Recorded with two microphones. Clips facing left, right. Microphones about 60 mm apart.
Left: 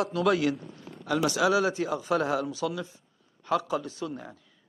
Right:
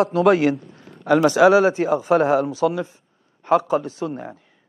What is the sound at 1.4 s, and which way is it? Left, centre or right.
Speech, right.